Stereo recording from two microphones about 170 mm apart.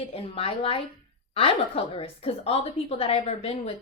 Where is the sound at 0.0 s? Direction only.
35° left (ahead or behind).